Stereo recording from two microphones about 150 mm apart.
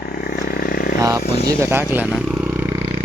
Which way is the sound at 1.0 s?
20° right (ahead or behind).